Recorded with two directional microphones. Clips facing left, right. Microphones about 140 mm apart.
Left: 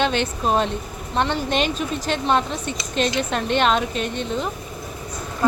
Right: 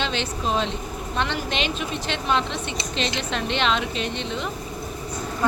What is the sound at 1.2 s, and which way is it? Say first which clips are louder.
A woman's voice: left 5 dB; 35° left (ahead or behind).